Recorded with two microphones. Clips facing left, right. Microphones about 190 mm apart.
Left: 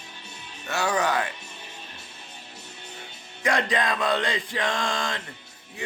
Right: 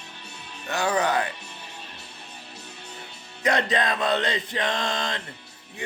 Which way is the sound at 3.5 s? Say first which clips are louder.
Right 1 dB; 20° right (ahead or behind).